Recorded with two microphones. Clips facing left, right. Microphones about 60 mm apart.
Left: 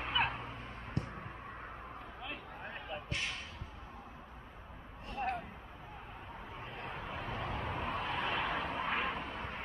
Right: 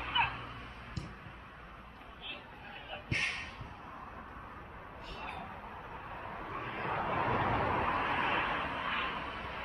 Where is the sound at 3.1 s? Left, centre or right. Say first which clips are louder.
Right 6 dB; right.